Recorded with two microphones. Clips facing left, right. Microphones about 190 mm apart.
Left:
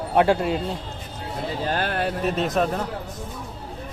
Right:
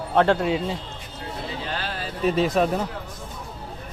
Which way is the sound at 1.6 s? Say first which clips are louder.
Left 10 dB; 50° left (ahead or behind).